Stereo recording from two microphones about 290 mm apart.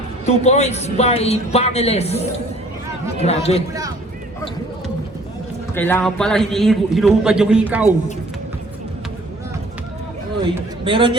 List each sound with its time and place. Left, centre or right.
0.3 s a man's voice: left
5.7 s a man's voice: centre
10.4 s a man's voice: centre